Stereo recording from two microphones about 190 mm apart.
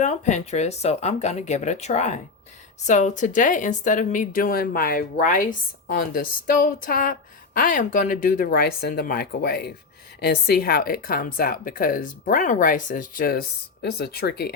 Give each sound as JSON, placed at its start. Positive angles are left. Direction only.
{"t": 0.0, "sound": "speech", "side_deg": 40}